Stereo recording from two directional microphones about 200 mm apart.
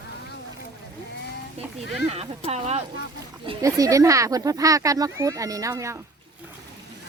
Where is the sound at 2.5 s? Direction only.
30° right (ahead or behind).